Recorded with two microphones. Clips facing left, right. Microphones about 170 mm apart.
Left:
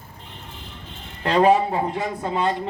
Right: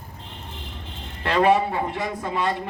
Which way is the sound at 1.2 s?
35° left (ahead or behind).